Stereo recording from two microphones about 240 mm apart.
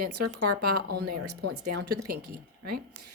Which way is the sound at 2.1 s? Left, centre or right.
Right.